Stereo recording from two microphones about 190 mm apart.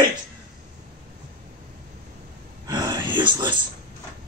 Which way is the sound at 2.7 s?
25° right (ahead or behind).